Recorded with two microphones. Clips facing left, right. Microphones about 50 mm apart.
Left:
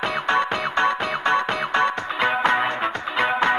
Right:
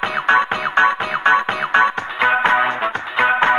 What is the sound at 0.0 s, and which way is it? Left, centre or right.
Music, right.